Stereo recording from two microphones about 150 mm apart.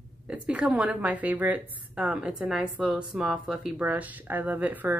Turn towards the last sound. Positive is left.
turn(degrees=-10)  # may be behind; listen again after turning